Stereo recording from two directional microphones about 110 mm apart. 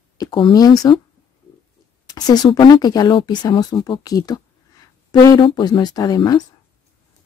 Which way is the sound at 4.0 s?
35° left (ahead or behind).